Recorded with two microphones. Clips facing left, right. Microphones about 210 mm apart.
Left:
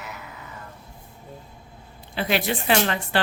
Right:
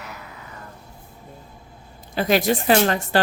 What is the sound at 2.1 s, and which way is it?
A woman's voice, 40° right (ahead or behind).